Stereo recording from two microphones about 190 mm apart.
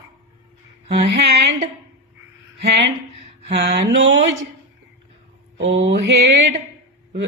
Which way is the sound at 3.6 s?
60° right (ahead or behind).